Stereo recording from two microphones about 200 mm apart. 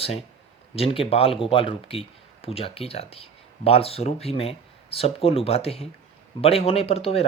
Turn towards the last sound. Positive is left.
turn(degrees=30)  # may be behind; listen again after turning